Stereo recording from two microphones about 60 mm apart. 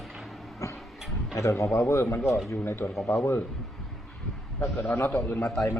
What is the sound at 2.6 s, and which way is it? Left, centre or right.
Speech, left.